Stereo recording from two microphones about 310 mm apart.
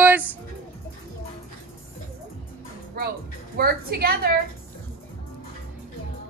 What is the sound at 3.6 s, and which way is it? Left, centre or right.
Speech, right.